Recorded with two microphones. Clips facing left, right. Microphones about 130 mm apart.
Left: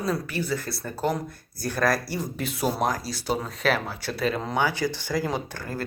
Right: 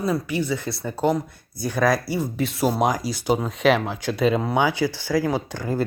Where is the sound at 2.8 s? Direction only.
15° right (ahead or behind).